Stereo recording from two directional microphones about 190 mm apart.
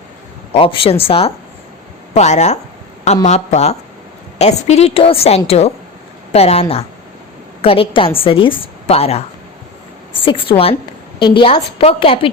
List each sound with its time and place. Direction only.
0.5 s a woman's voice: 30° left (ahead or behind)